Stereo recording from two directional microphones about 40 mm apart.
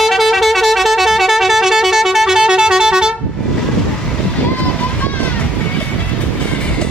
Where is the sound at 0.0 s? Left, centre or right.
Centre.